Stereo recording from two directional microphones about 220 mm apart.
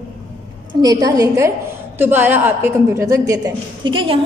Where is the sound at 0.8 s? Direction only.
15° right (ahead or behind).